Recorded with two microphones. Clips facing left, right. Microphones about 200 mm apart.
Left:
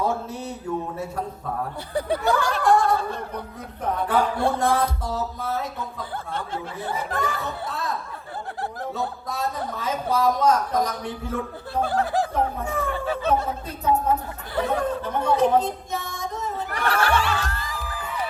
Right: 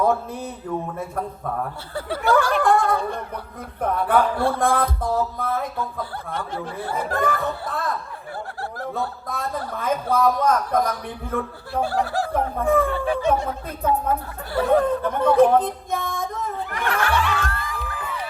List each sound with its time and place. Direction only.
0.0 s mantra: 55° right (ahead or behind)
1.9 s speech: 15° left (ahead or behind)
2.3 s snicker: 55° right (ahead or behind)
3.8 s a man's voice: 55° right (ahead or behind)
4.4 s music: 20° left (ahead or behind)
4.6 s a man's voice: 55° right (ahead or behind)
7.2 s a man's voice: 55° right (ahead or behind)
12.0 s snicker: 20° left (ahead or behind)
12.3 s a man's voice: 55° right (ahead or behind)
13.1 s music: 15° right (ahead or behind)
14.5 s speech: 55° right (ahead or behind)
16.7 s music: 35° left (ahead or behind)
17.4 s music: 55° right (ahead or behind)